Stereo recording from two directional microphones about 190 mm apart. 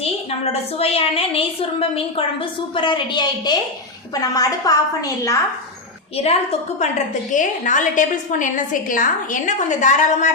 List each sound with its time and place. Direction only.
0.8 s a woman's voice: 30° left (ahead or behind)
6.7 s a woman's voice: 40° left (ahead or behind)